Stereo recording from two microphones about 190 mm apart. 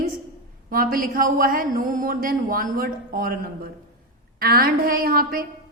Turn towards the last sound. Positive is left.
turn(degrees=-50)  # may be behind; listen again after turning